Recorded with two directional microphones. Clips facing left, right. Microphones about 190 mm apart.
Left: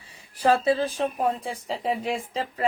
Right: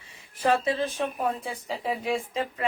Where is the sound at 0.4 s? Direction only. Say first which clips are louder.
Left 3 dB; 35° left (ahead or behind).